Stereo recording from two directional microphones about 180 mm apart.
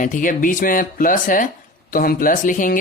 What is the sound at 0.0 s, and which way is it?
Speech, 45° left (ahead or behind).